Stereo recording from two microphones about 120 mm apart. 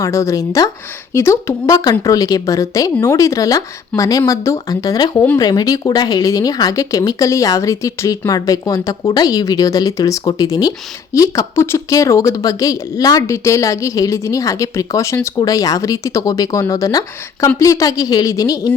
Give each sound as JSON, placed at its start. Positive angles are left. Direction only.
{"t": 0.0, "sound": "speech", "side_deg": 25}